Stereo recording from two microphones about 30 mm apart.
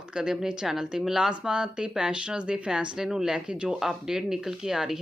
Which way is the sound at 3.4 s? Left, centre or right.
Right.